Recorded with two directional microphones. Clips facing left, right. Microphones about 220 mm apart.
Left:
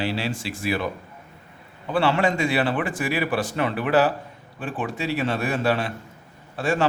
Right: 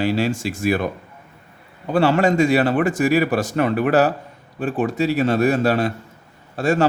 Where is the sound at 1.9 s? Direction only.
40° right (ahead or behind).